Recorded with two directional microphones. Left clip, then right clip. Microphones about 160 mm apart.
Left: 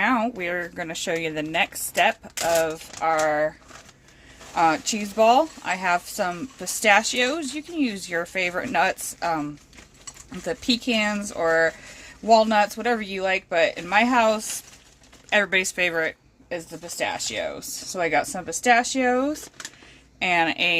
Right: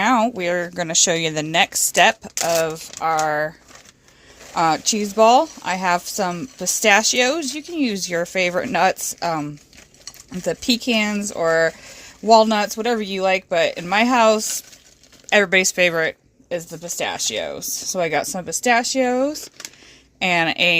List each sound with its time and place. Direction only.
0.0 s speech: 50° right (ahead or behind)
4.5 s a woman's voice: 50° right (ahead or behind)
20.1 s speech: 60° right (ahead or behind)